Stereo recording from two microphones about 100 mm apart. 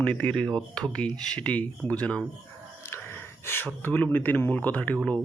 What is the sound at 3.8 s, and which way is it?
Speech, 20° left (ahead or behind).